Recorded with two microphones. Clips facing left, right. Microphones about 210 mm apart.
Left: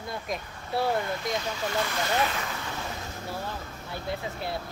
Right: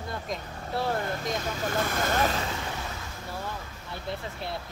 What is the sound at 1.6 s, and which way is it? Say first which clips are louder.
Speech: right 2 dB; 50° right (ahead or behind).